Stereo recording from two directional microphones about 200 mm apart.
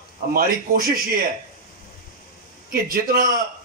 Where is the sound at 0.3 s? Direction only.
50° right (ahead or behind).